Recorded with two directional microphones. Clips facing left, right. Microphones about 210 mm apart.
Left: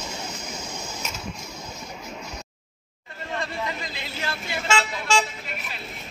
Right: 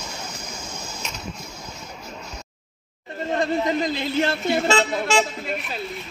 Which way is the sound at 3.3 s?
45° right (ahead or behind).